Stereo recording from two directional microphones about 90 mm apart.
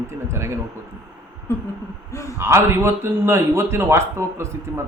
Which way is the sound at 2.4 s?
30° right (ahead or behind).